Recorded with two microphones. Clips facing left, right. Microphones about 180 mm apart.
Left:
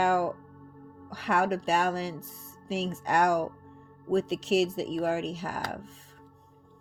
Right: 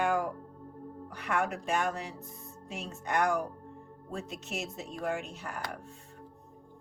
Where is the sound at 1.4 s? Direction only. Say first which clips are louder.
Left 5 dB; 90° left.